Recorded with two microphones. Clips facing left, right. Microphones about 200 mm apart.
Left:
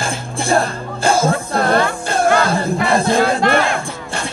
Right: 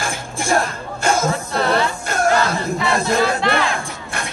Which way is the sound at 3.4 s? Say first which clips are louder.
Left 4 dB; 50° left (ahead or behind).